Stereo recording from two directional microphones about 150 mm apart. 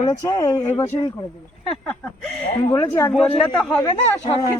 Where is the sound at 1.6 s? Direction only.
5° left (ahead or behind).